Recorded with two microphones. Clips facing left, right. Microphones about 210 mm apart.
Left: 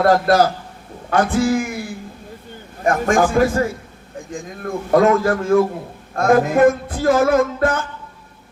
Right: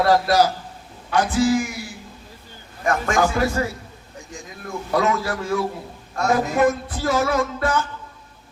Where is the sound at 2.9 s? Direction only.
50° left (ahead or behind).